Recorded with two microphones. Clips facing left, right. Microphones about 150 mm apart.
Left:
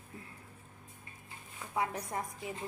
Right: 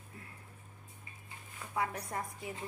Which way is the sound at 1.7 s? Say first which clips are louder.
Left 1 dB; 20° left (ahead or behind).